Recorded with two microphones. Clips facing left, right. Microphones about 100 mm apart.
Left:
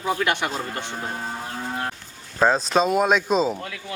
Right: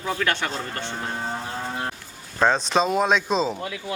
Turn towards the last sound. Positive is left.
turn(degrees=5)  # may be behind; listen again after turning